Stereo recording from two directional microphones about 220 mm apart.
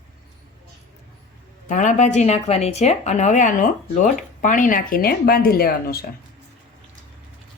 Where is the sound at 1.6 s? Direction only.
35° left (ahead or behind).